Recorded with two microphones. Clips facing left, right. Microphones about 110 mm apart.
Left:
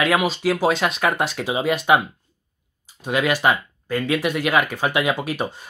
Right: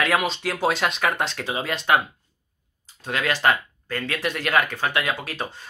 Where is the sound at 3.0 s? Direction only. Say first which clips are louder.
Left 3 dB; 15° left (ahead or behind).